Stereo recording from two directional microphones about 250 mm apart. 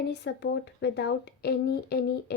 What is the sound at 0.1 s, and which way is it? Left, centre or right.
Speech, left.